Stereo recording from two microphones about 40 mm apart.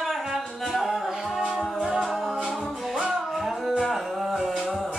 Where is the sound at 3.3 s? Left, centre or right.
Centre.